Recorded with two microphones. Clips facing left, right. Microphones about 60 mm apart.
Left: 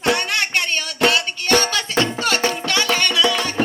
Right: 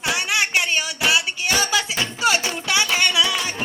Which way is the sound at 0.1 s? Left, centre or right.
Centre.